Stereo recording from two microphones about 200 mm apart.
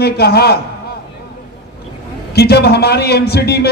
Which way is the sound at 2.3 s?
55° left (ahead or behind).